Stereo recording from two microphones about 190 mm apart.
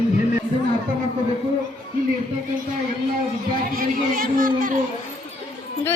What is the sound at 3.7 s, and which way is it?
Speech, 50° right (ahead or behind).